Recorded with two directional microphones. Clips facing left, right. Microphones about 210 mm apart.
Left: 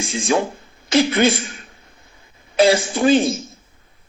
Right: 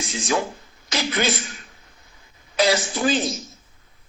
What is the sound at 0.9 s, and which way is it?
Speech, 55° left (ahead or behind).